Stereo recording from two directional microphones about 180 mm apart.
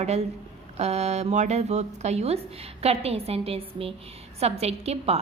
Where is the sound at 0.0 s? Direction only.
35° right (ahead or behind).